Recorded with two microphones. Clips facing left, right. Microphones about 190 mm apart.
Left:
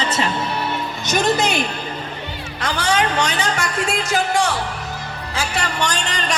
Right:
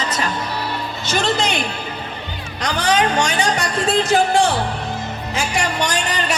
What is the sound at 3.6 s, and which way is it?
Speech, 35° right (ahead or behind).